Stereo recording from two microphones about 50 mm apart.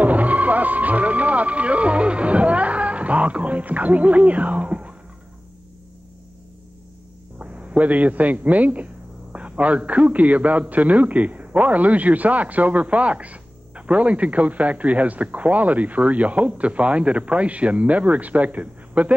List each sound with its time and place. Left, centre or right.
0.0 s music: right
7.3 s a man's voice: right